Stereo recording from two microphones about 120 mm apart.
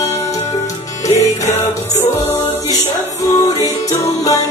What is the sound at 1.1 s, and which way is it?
Music, 70° left (ahead or behind).